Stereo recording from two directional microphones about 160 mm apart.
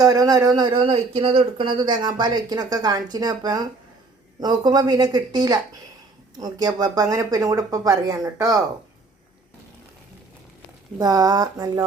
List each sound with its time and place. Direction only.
0.0 s speech: 25° right (ahead or behind)
10.9 s speech: 25° right (ahead or behind)